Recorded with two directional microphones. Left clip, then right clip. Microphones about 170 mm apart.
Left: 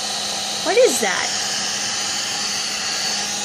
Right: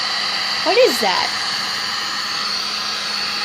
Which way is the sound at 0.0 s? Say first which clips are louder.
Right 4 dB; 30° left (ahead or behind).